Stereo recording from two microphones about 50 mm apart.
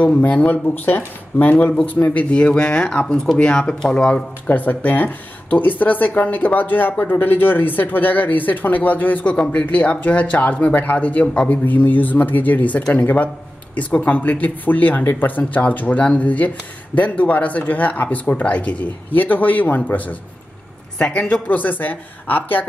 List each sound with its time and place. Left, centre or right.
0.0 s speech: left
2.3 s speech: left
4.5 s speech: left
9.3 s speech: left
21.0 s speech: left
21.5 s speech: left